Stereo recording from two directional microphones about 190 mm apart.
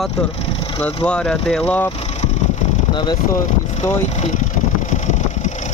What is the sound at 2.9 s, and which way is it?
Speech, 20° left (ahead or behind).